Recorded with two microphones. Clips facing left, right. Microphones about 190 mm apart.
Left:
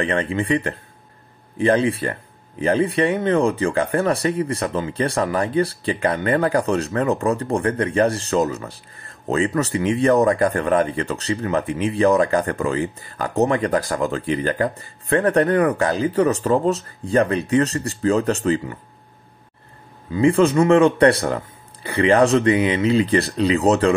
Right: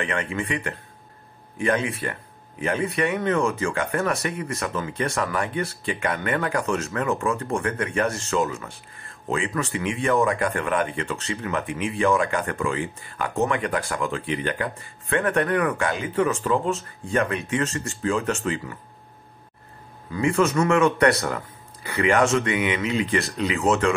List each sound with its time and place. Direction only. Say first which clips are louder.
0.0 s speech: left 6 dB; 35° left (ahead or behind)
20.1 s speech: left 6 dB; 30° left (ahead or behind)